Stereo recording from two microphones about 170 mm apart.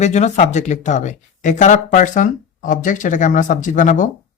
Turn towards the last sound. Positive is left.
turn(degrees=50)  # may be behind; listen again after turning